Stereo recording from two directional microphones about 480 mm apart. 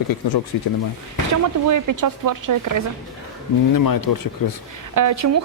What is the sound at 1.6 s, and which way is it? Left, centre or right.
Speech, right.